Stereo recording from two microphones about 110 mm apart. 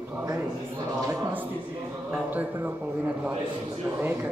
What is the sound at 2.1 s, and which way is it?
Speech, 15° right (ahead or behind).